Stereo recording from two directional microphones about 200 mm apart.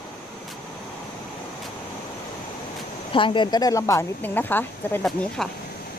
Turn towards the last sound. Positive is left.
turn(degrees=5)  # may be behind; listen again after turning